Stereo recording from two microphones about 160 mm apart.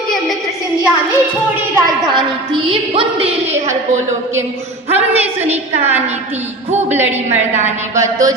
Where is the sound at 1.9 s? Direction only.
30° right (ahead or behind).